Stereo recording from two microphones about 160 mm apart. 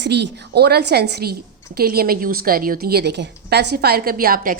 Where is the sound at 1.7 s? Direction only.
70° right (ahead or behind).